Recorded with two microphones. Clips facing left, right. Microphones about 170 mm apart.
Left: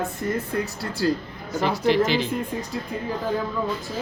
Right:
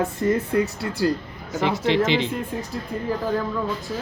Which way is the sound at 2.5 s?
Centre (ahead or behind).